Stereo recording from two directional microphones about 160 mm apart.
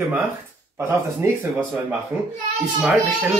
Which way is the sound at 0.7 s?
15° right (ahead or behind).